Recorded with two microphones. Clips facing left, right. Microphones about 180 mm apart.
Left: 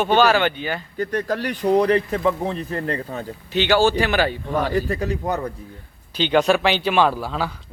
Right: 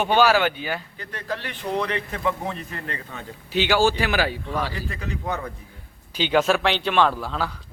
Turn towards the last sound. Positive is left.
turn(degrees=5)  # may be behind; listen again after turning